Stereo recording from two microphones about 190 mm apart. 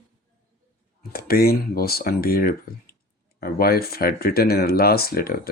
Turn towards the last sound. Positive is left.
turn(degrees=50)  # may be behind; listen again after turning